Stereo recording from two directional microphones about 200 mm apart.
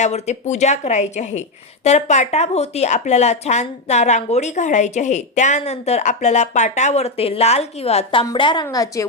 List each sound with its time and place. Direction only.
0.0 s a woman's voice: 35° left (ahead or behind); by 9.0 s 15° left (ahead or behind)